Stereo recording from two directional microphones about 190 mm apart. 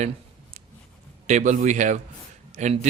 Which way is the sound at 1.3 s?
40° right (ahead or behind).